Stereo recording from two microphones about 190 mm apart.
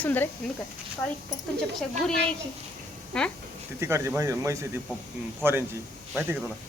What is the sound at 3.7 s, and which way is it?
Speech, 15° right (ahead or behind).